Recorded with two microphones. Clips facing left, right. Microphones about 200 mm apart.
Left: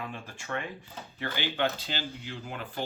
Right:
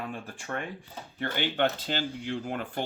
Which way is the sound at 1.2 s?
55° right (ahead or behind).